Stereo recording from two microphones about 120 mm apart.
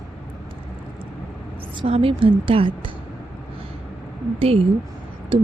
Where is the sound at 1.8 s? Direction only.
50° right (ahead or behind).